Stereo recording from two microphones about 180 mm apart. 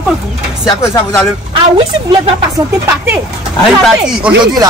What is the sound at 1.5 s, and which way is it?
Speech, 30° right (ahead or behind).